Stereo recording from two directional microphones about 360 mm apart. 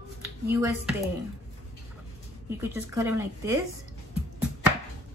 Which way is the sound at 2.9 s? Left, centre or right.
Centre.